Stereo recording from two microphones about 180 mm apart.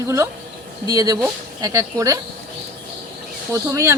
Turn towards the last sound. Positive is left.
turn(degrees=-15)  # may be behind; listen again after turning